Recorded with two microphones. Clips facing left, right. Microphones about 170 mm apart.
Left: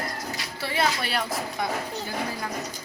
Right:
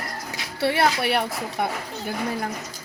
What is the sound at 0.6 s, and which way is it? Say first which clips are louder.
A woman's voice: right 6 dB; 65° right (ahead or behind).